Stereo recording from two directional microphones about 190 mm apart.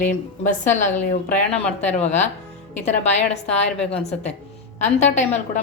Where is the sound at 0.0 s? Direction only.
40° left (ahead or behind).